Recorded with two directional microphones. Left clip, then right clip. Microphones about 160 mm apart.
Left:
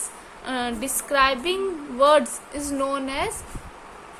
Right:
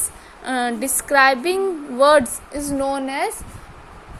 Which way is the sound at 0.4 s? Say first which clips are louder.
Right 5 dB; 35° right (ahead or behind).